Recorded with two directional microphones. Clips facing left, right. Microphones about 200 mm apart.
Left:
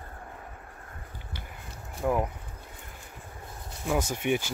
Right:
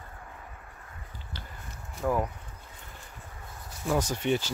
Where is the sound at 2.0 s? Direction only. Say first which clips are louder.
Left 1 dB; 15° left (ahead or behind).